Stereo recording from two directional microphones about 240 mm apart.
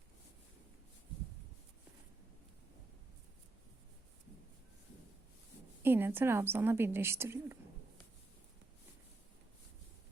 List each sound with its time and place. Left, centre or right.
5.8 s a woman's voice: centre